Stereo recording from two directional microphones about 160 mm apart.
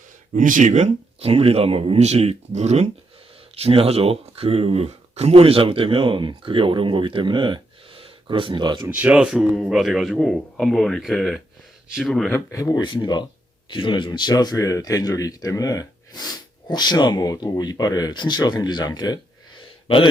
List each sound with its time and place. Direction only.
0.3 s speech: 55° right (ahead or behind); by 8.9 s 30° right (ahead or behind)
8.9 s a man's voice: 10° right (ahead or behind)
12.3 s speech: 20° left (ahead or behind)